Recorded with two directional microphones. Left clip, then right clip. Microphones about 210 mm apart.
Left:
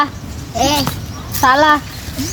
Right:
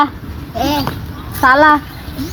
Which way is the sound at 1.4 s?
25° right (ahead or behind).